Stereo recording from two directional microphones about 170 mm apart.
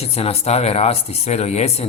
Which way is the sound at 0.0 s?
35° left (ahead or behind).